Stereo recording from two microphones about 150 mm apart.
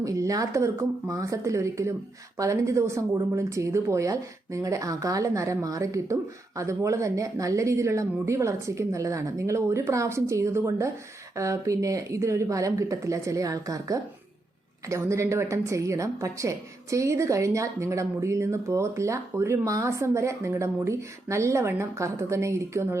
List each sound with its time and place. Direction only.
0.0 s a woman's voice: 20° right (ahead or behind)